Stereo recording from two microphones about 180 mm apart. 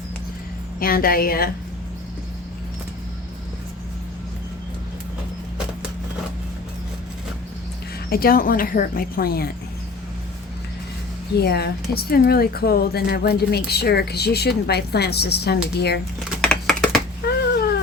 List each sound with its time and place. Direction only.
0.8 s speech: 55° left (ahead or behind)
8.1 s a woman's voice: 55° left (ahead or behind)
11.3 s speech: 65° left (ahead or behind)
16.3 s typing: 5° left (ahead or behind)